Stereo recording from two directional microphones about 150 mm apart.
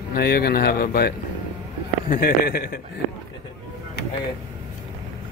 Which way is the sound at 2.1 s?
75° left (ahead or behind).